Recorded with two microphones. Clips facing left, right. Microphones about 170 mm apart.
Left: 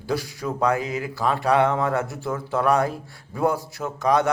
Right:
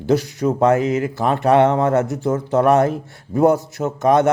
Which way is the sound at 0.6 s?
45° right (ahead or behind).